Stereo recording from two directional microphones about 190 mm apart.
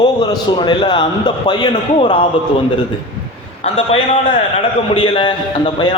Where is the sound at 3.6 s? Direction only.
30° left (ahead or behind).